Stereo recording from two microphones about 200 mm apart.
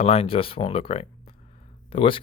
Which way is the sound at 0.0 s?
30° left (ahead or behind).